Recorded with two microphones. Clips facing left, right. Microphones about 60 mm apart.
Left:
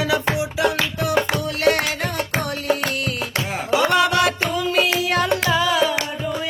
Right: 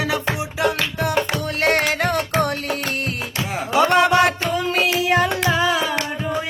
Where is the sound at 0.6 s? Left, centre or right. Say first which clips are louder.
Right 3 dB; right.